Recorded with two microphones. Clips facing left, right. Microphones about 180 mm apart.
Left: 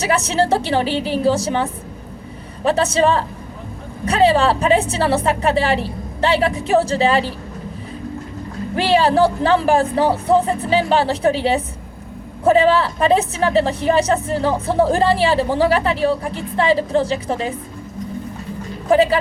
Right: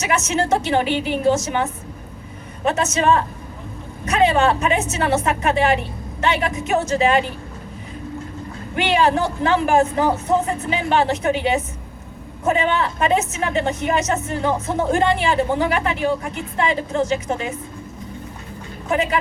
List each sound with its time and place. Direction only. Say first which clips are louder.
0.0 s a woman's voice: left 3 dB; 35° left (ahead or behind)
8.7 s a woman's voice: left 3 dB; 30° left (ahead or behind)
18.9 s a woman's voice: left 7 dB; 35° left (ahead or behind)